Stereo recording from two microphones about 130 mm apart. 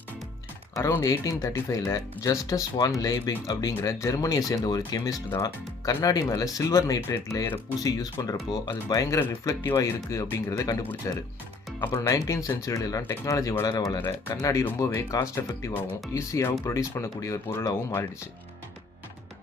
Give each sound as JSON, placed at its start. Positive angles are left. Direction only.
{"t": 0.8, "sound": "speech", "side_deg": 20}